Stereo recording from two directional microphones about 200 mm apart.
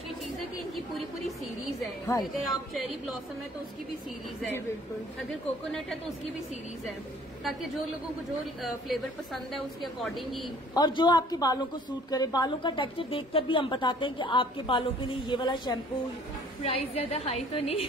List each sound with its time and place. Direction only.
2.4 s a woman's voice: centre (ahead or behind)
8.6 s a woman's voice: centre (ahead or behind)
10.7 s a woman's voice: 20° left (ahead or behind)